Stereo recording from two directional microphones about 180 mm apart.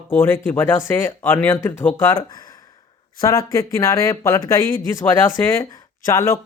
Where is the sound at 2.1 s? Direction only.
25° left (ahead or behind).